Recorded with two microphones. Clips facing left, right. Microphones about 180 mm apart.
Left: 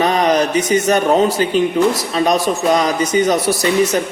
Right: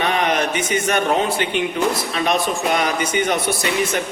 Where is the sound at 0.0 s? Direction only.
35° left (ahead or behind).